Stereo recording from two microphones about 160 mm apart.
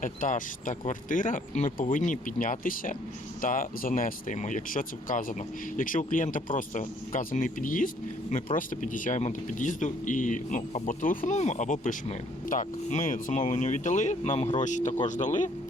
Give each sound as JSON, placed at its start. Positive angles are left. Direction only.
{"t": 0.0, "sound": "speech", "side_deg": 55}